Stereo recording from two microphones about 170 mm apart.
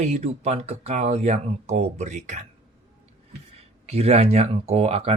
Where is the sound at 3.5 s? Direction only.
40° right (ahead or behind).